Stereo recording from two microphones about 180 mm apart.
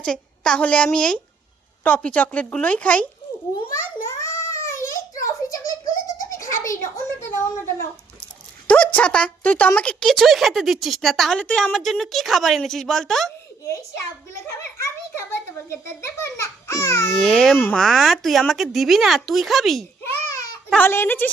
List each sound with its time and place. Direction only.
0.0 s a woman's voice: 5° left (ahead or behind)
3.7 s a sound: 15° left (ahead or behind)
8.6 s a woman's voice: 10° left (ahead or behind)
15.7 s speech: 15° left (ahead or behind)
17.2 s a woman's voice: centre (ahead or behind)